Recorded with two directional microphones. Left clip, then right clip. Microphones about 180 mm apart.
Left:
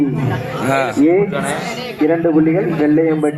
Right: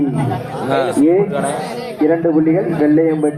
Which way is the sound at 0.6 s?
20° left (ahead or behind).